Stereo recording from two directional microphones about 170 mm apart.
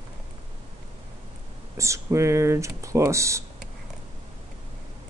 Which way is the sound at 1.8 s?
15° right (ahead or behind).